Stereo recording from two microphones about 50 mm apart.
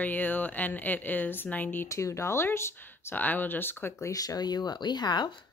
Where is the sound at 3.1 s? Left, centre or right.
Left.